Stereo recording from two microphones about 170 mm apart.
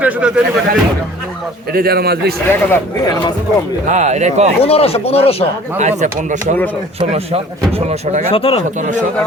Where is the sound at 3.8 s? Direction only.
45° right (ahead or behind).